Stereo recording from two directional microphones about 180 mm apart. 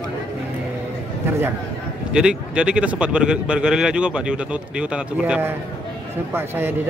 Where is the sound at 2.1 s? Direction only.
5° right (ahead or behind).